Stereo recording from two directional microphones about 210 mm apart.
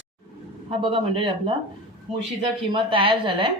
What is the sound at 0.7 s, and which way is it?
A woman's voice, 25° right (ahead or behind).